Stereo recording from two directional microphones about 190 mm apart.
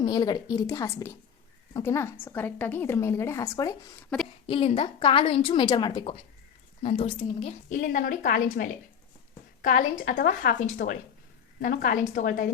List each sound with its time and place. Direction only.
0.0 s a woman's voice: 20° left (ahead or behind)
4.1 s speech: 5° left (ahead or behind)
4.4 s a woman's voice: 30° left (ahead or behind); by 12.5 s 45° left (ahead or behind)